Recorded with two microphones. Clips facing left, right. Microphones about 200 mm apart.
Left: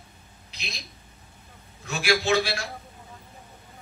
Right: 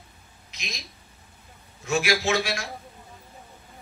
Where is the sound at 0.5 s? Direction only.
35° left (ahead or behind).